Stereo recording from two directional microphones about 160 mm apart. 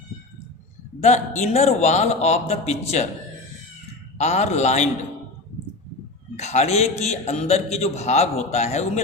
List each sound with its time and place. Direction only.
1.0 s a man's voice: 45° left (ahead or behind)
4.2 s a man's voice: 45° left (ahead or behind)
6.3 s a man's voice: 45° left (ahead or behind)